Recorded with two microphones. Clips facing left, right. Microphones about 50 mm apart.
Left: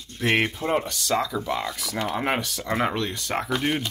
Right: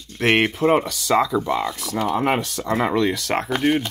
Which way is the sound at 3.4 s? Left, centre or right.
Right.